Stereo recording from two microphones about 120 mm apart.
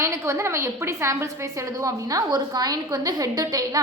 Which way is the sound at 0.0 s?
25° right (ahead or behind).